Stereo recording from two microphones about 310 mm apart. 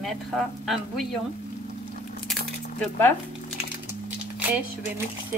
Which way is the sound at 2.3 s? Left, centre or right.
Centre.